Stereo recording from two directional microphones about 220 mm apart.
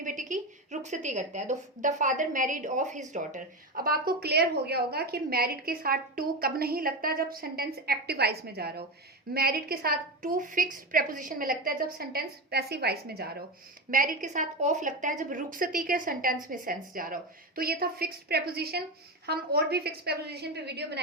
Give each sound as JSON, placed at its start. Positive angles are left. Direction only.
{"t": 0.0, "sound": "a woman's voice", "side_deg": -35}